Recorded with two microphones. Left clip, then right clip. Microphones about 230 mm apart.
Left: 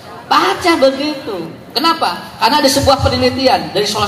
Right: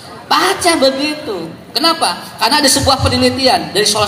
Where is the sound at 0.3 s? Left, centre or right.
Right.